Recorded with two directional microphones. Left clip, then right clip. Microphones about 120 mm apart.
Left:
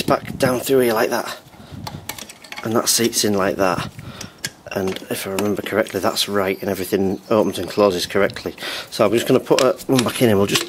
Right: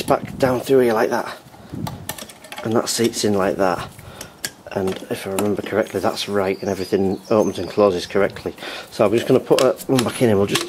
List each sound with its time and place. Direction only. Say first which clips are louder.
0.1 s speech: right 1 dB; 40° left (ahead or behind)
2.6 s speech: left 1 dB; 45° left (ahead or behind)
4.9 s speech: even; 45° left (ahead or behind)